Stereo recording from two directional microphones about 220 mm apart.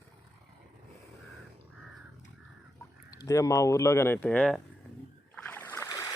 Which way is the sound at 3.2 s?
15° left (ahead or behind).